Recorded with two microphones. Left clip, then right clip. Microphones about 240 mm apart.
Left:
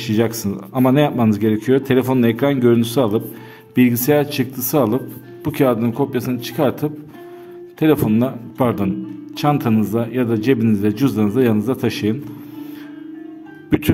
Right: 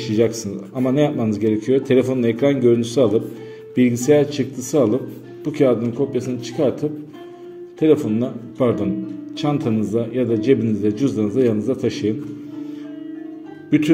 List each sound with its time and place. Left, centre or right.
0.0 s speech: left
13.7 s speech: left